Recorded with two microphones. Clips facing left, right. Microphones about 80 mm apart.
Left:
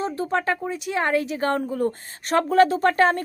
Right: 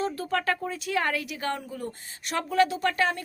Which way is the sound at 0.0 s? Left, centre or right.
Left.